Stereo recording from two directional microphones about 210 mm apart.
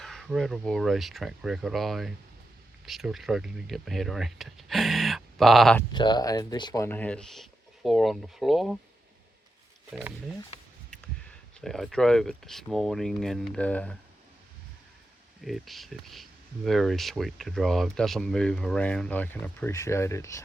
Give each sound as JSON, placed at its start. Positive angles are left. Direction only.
{"t": 0.0, "sound": "speech", "side_deg": 0}
{"t": 5.9, "sound": "speech", "side_deg": 20}
{"t": 10.9, "sound": "speech", "side_deg": 5}
{"t": 15.4, "sound": "speech", "side_deg": 0}